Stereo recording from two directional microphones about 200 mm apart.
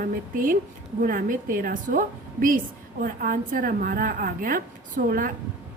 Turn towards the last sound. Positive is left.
turn(degrees=-45)  # may be behind; listen again after turning